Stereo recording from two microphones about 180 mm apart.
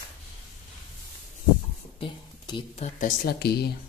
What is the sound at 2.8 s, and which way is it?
Speech, 50° left (ahead or behind).